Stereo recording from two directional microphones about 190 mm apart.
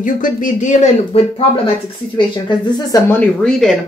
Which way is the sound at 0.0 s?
45° left (ahead or behind).